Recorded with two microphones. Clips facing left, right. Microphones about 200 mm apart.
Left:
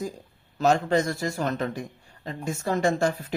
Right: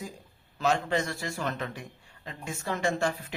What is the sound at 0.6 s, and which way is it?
Speech, 40° left (ahead or behind).